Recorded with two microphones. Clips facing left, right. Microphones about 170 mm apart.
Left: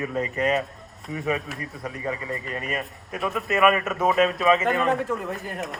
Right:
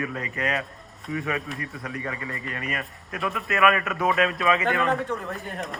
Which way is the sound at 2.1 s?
25° left (ahead or behind).